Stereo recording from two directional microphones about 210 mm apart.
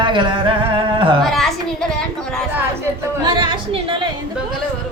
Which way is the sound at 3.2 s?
20° right (ahead or behind).